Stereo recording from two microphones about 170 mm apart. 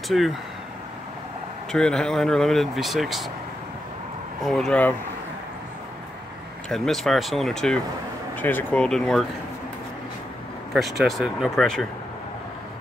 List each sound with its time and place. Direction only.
0.1 s speech: centre (ahead or behind)
1.7 s speech: 5° left (ahead or behind)
4.4 s speech: centre (ahead or behind)
6.7 s speech: centre (ahead or behind)
10.7 s speech: centre (ahead or behind)